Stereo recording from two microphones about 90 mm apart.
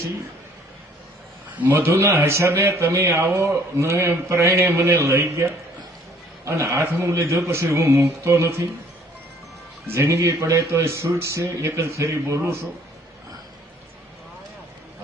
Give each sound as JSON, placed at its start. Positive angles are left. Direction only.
{"t": 1.5, "sound": "a man's voice", "side_deg": -20}
{"t": 9.8, "sound": "speech", "side_deg": -30}